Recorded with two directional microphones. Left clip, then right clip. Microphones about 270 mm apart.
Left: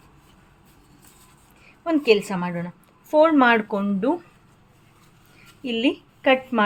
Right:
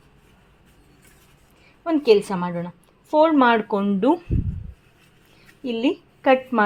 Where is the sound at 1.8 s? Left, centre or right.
Centre.